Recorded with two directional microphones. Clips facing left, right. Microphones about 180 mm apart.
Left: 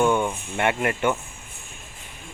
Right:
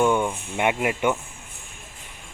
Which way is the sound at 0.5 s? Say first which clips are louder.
Even; 10° right (ahead or behind).